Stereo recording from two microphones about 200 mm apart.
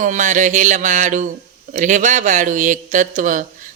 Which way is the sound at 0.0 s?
40° right (ahead or behind).